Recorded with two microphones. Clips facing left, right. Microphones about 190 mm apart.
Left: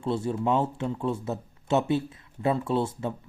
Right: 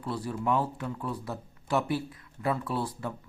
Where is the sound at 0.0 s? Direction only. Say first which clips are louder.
Left 5 dB; 25° left (ahead or behind).